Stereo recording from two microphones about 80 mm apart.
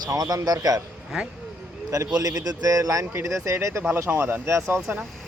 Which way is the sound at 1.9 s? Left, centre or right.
Right.